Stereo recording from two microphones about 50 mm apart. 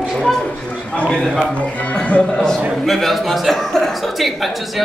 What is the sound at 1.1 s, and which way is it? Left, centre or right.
Speech, centre.